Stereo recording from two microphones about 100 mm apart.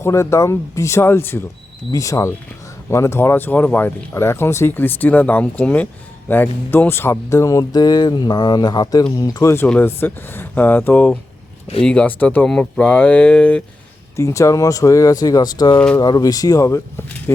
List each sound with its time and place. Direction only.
0.0 s speech: 30° left (ahead or behind)
1.9 s speech: 35° left (ahead or behind); by 13.6 s 10° left (ahead or behind)
14.2 s speech: 30° left (ahead or behind)